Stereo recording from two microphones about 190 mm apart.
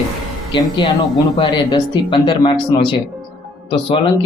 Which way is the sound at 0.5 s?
25° left (ahead or behind).